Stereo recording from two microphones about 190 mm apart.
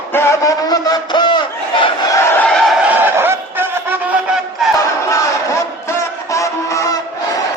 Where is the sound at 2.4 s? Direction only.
5° left (ahead or behind).